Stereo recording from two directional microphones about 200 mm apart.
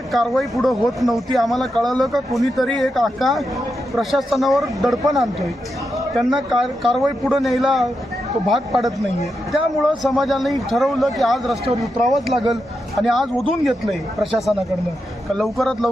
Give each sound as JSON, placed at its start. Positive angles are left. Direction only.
{"t": 0.1, "sound": "speech", "side_deg": 0}
{"t": 6.1, "sound": "speech", "side_deg": 0}